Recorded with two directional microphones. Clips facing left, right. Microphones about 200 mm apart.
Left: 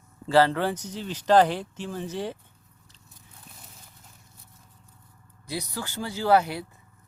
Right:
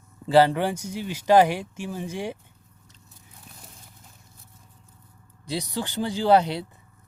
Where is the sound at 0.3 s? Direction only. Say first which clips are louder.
Right 2 dB; 15° right (ahead or behind).